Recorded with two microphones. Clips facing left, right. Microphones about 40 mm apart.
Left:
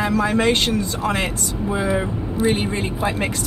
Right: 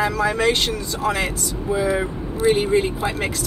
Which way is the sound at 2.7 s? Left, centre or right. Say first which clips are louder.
Right 3 dB; centre.